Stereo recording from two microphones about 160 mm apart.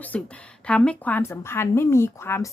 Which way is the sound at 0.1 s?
5° left (ahead or behind).